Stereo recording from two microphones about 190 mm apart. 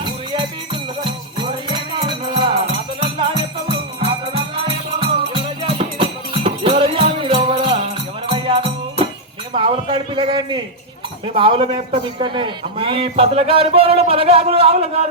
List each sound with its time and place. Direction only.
0.0 s music: 25° right (ahead or behind)
9.6 s a sound: 25° right (ahead or behind)
11.3 s a man's voice: 25° right (ahead or behind)